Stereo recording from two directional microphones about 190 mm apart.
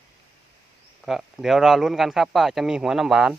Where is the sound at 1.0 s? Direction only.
Centre (ahead or behind).